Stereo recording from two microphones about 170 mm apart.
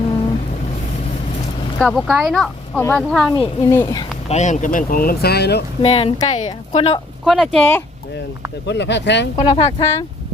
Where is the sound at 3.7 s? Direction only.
15° left (ahead or behind).